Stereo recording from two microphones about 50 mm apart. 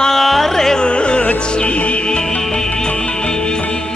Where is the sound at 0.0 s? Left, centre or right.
Centre.